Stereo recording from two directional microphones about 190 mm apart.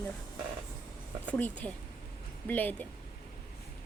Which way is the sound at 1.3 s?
10° left (ahead or behind).